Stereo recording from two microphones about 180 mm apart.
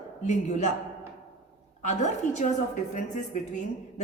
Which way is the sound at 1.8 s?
40° left (ahead or behind).